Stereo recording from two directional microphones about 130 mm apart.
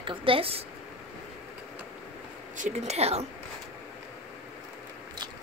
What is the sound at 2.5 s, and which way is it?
Speech, 70° right (ahead or behind).